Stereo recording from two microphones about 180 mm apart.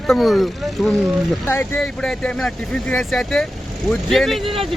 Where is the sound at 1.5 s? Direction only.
15° left (ahead or behind).